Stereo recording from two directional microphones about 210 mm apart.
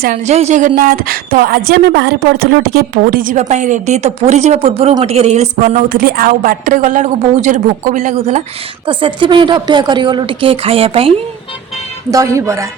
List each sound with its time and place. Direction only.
0.0 s a woman's voice: 45° right (ahead or behind); by 11.1 s 25° right (ahead or behind)
12.1 s speech: 15° right (ahead or behind)